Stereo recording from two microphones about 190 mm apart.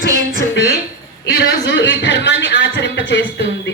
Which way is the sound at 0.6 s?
60° left (ahead or behind).